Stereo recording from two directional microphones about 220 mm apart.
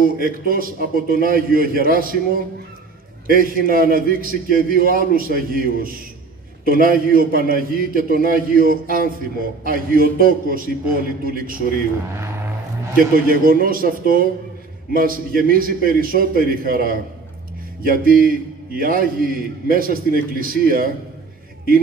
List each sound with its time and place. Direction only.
0.2 s a man's voice: 40° right (ahead or behind)
12.9 s a man's voice: 40° right (ahead or behind)